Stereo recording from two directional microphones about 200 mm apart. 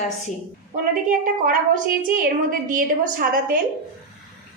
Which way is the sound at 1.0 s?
40° right (ahead or behind).